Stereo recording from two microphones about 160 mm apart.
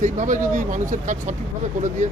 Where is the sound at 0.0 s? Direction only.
50° right (ahead or behind).